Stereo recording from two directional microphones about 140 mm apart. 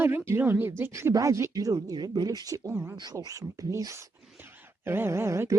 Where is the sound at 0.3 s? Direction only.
15° right (ahead or behind).